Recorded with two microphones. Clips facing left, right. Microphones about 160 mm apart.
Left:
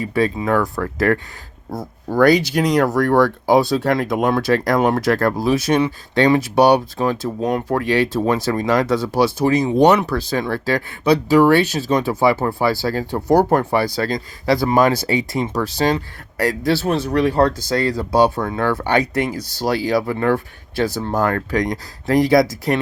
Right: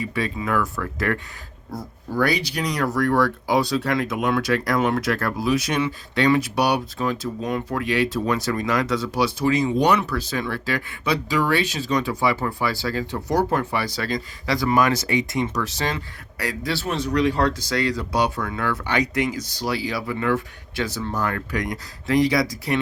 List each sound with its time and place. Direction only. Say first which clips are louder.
0.1 s speech: left 10 dB; 40° left (ahead or behind)
8.2 s speech: left 5 dB; 30° left (ahead or behind)
12.4 s speech: left 6 dB; 35° left (ahead or behind)
13.2 s speech: left 8 dB; 55° left (ahead or behind); by 17.2 s 35° left (ahead or behind)
17.2 s speech: left 4 dB; 50° left (ahead or behind)
17.7 s speech: left 5 dB; 35° left (ahead or behind)